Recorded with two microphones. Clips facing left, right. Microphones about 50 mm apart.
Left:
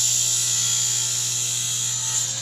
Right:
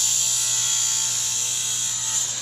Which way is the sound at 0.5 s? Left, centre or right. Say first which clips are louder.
Even; centre.